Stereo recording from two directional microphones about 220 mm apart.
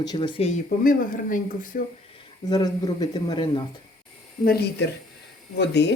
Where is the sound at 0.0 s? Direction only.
20° left (ahead or behind); by 1.8 s 40° left (ahead or behind).